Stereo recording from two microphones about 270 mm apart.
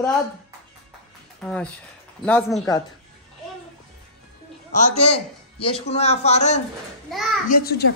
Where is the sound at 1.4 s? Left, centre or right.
Centre.